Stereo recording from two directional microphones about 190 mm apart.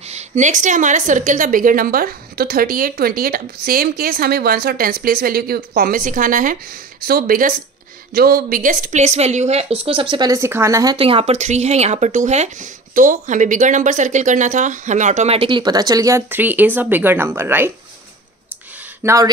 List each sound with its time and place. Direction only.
0.1 s a woman's voice: 40° right (ahead or behind); by 11.0 s 15° right (ahead or behind)
11.0 s a woman's voice: 30° right (ahead or behind); by 17.7 s 10° right (ahead or behind)
19.0 s speech: 20° right (ahead or behind)